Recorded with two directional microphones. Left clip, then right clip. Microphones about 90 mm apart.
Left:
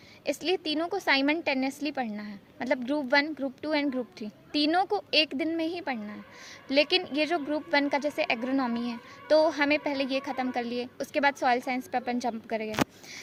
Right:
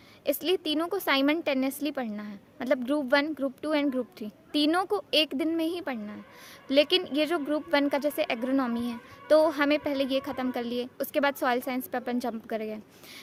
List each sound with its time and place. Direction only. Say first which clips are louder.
0.3 s a child's voice: right 2 dB; 45° right (ahead or behind)